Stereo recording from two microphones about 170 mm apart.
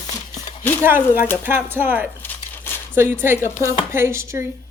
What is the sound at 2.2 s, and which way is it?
Crumpling, 15° left (ahead or behind).